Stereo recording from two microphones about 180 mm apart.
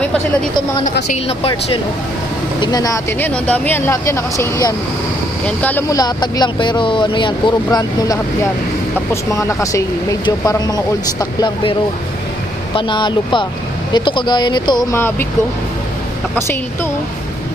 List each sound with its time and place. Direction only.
1.0 s speech: 35° left (ahead or behind)
2.6 s speech: 20° left (ahead or behind)
12.7 s speech: 25° left (ahead or behind)
14.9 s speech: 10° left (ahead or behind)
16.3 s speech: 10° left (ahead or behind)